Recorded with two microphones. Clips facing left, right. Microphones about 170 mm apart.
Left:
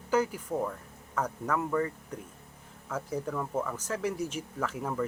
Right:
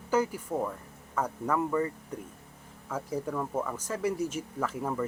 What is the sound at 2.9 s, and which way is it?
Speech, 5° right (ahead or behind).